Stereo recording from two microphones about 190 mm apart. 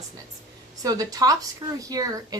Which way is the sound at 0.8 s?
20° right (ahead or behind).